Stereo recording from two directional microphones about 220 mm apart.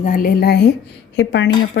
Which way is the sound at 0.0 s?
40° left (ahead or behind).